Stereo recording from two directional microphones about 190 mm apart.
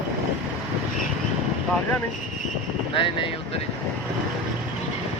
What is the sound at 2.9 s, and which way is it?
Speech, 30° left (ahead or behind).